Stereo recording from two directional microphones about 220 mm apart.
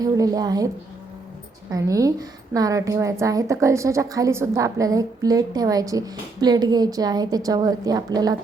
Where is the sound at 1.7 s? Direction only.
15° right (ahead or behind).